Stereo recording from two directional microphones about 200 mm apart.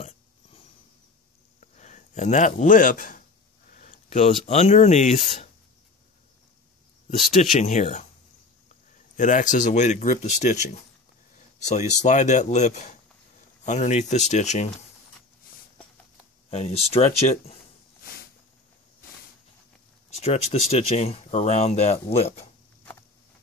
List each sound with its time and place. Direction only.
1.6 s a sound: 35° left (ahead or behind)
4.5 s speech: 35° left (ahead or behind)
7.5 s speech: 35° left (ahead or behind)
9.1 s speech: 40° left (ahead or behind)
16.4 s speech: 30° left (ahead or behind)
20.2 s speech: 30° left (ahead or behind)